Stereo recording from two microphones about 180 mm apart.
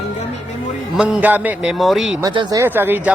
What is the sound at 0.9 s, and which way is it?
A man's voice, 5° right (ahead or behind).